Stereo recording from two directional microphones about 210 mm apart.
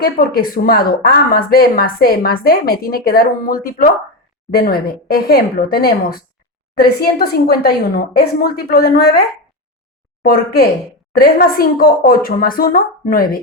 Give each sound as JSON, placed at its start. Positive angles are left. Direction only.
{"t": 0.0, "sound": "speech", "side_deg": 45}
{"t": 10.2, "sound": "speech", "side_deg": 45}